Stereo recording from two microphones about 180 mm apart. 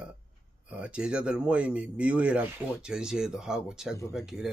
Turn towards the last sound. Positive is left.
turn(degrees=-5)  # may be behind; listen again after turning